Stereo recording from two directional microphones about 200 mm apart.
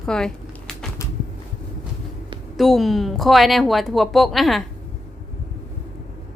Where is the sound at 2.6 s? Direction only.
Centre (ahead or behind).